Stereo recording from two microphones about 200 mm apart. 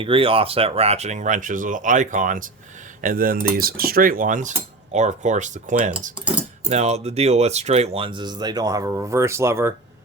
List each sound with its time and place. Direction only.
0.0 s speech: 25° right (ahead or behind)
3.0 s cutlery: 45° right (ahead or behind)
6.7 s speech: 35° right (ahead or behind); by 9.7 s 15° right (ahead or behind)